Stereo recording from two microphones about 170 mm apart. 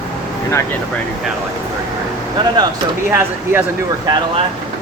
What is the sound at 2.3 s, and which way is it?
Speech, 25° right (ahead or behind).